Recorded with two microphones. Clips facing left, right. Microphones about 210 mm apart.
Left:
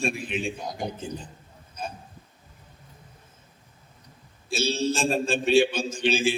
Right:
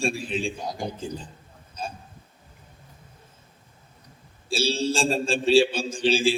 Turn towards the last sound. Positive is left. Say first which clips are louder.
# right 2 dB
turn(degrees=-30)  # may be behind; listen again after turning